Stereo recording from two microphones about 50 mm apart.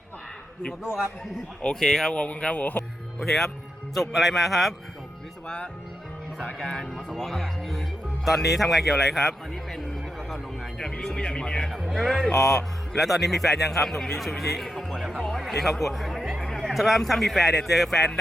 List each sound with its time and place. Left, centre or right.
1.6 s speech: centre
2.2 s speech: left
3.2 s speech: centre
4.1 s a man's voice: centre
6.6 s speech: centre
10.2 s a sound: centre
11.0 s speech: centre
11.7 s speech: centre
11.9 s speech: centre
13.0 s a man's voice: centre
16.4 s a sound: centre
17.0 s a man's voice: centre